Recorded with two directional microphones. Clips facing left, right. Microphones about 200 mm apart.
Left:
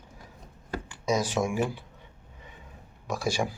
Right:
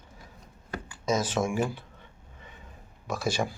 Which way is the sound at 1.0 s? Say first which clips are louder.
Even; 15° left (ahead or behind).